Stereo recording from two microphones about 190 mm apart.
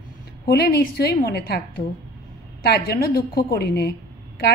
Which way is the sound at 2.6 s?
55° left (ahead or behind).